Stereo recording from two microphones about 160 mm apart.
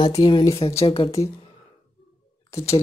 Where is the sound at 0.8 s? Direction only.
35° left (ahead or behind).